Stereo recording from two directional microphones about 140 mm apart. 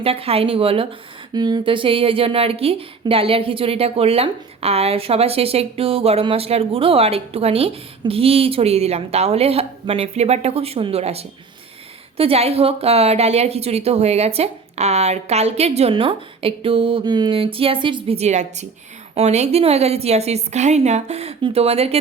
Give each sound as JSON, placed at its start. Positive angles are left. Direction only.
{"t": 0.0, "sound": "speech", "side_deg": -45}
{"t": 1.3, "sound": "speech", "side_deg": -30}